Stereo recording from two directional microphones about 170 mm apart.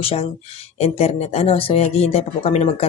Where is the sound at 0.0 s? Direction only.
35° left (ahead or behind).